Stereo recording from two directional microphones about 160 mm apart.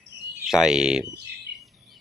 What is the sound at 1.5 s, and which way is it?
Bird, 90° right.